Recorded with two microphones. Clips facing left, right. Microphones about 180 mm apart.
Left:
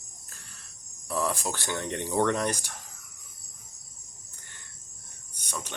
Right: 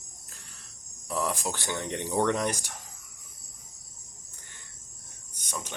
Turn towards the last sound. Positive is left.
turn(degrees=-15)  # may be behind; listen again after turning